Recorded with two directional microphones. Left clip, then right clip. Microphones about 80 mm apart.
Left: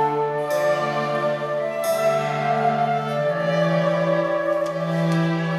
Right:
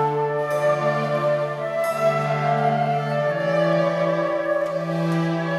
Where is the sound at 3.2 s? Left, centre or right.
Centre.